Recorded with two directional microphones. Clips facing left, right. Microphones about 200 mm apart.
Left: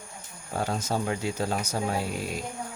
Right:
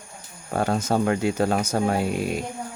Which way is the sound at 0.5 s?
60° right (ahead or behind).